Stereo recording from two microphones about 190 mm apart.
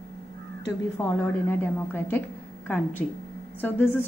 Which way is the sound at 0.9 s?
10° left (ahead or behind).